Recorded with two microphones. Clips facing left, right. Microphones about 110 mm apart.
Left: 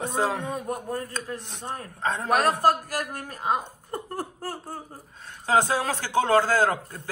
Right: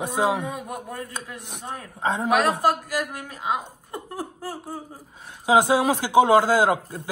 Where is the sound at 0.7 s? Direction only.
40° left (ahead or behind).